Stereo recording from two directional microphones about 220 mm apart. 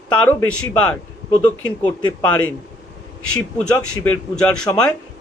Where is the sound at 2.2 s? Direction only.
10° left (ahead or behind).